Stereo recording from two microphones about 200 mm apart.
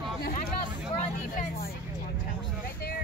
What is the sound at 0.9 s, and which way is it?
Vehicle, 45° left (ahead or behind).